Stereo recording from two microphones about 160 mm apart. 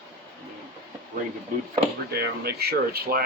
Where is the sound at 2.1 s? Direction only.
75° right (ahead or behind).